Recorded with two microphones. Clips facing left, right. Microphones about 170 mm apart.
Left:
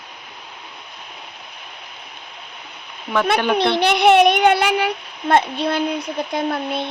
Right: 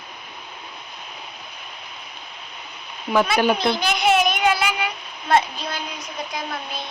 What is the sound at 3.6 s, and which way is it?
A child's voice, 65° left (ahead or behind).